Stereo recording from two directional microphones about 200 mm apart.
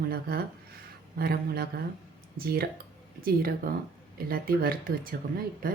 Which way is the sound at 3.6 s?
45° right (ahead or behind).